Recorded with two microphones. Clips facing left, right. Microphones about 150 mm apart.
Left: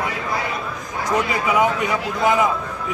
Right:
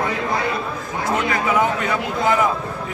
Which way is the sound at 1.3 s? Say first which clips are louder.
Right 1 dB; 15° left (ahead or behind).